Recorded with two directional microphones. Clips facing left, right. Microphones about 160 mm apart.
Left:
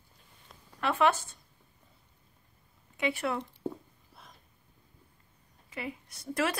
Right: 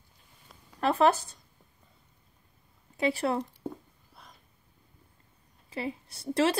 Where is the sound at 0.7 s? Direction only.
35° right (ahead or behind).